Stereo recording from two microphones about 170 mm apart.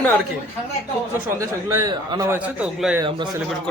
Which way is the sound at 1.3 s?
20° right (ahead or behind).